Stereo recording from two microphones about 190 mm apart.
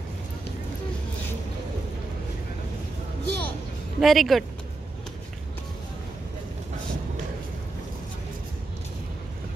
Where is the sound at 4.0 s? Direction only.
Centre (ahead or behind).